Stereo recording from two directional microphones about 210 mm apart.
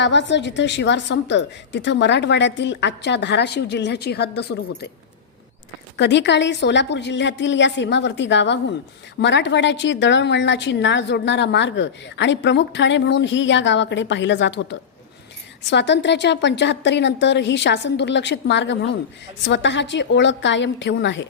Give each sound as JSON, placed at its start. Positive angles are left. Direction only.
{"t": 0.0, "sound": "a woman's voice", "side_deg": 60}
{"t": 6.0, "sound": "a woman's voice", "side_deg": 55}